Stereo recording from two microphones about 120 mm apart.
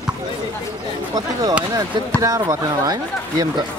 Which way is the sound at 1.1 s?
30° right (ahead or behind).